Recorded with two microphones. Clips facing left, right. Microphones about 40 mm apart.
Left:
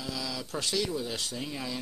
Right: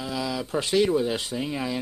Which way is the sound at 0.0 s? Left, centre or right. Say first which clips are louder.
Right 7 dB; right.